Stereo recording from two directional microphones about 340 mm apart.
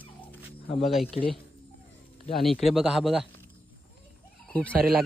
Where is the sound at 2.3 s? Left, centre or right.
Centre.